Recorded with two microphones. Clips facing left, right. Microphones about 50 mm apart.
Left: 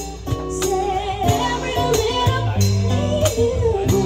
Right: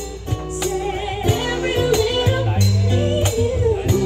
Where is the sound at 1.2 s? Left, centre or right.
Centre.